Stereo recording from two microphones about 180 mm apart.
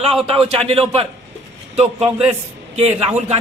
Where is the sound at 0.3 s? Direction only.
30° right (ahead or behind).